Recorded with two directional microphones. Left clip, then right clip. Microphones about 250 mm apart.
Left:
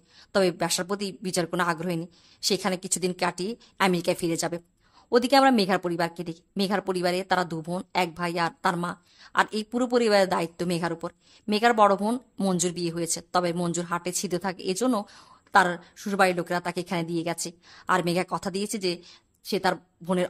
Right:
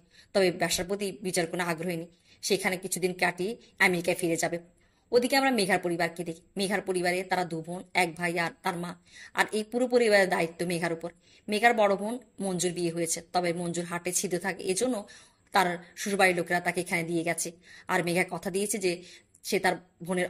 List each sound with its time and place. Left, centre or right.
0.3 s a woman's voice: centre
12.1 s speech: left
12.5 s a woman's voice: centre